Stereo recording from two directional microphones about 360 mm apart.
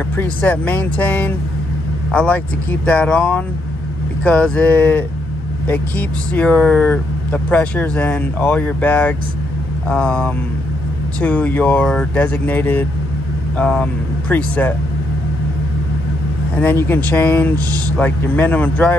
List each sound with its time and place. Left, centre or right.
0.2 s speech: centre
16.5 s speech: centre